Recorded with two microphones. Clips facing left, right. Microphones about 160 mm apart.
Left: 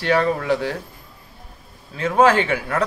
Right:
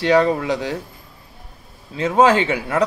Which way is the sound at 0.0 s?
20° right (ahead or behind).